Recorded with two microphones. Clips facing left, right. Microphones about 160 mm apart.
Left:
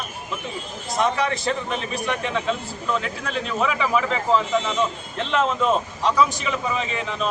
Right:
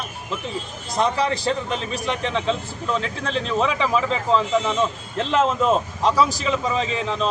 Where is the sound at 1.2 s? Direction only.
30° right (ahead or behind).